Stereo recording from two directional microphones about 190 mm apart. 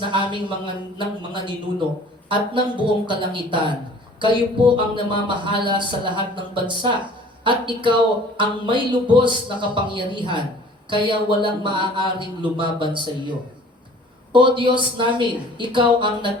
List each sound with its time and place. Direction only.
0.0 s speech: 25° right (ahead or behind)
14.3 s speech: 25° right (ahead or behind)